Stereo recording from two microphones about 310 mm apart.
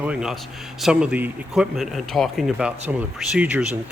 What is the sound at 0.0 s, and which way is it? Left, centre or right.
A man's voice, centre.